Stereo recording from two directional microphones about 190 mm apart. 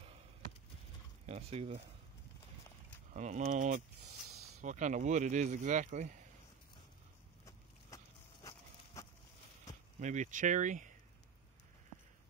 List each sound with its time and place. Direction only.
1.2 s speech: 35° right (ahead or behind)
3.1 s speech: 40° right (ahead or behind)
7.4 s horse: 20° left (ahead or behind)
9.9 s speech: 40° right (ahead or behind)